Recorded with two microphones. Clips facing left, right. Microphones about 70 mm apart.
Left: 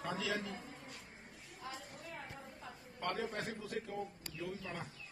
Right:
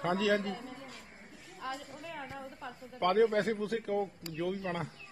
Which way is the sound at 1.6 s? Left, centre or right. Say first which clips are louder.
Right 8 dB; right.